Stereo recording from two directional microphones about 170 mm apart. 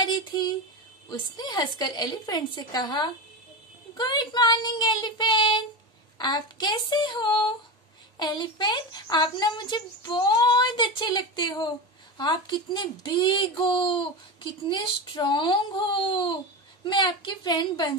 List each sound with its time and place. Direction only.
0.0 s a sound: 25° left (ahead or behind)
1.0 s speech: 25° left (ahead or behind)
3.9 s child singing: 25° left (ahead or behind)
6.1 s speech: 25° left (ahead or behind)